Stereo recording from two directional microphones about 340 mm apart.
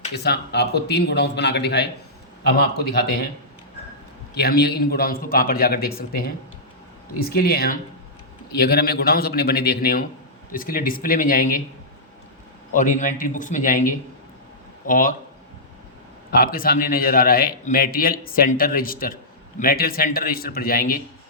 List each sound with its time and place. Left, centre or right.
0.0 s a man's voice: left
4.4 s a man's voice: left
12.7 s a man's voice: left
16.3 s a man's voice: left